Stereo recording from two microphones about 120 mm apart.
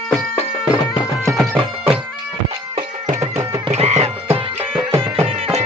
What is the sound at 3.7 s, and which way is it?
Music, 65° right (ahead or behind).